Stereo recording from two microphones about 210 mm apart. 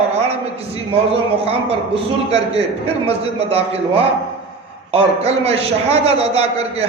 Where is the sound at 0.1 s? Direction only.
30° right (ahead or behind).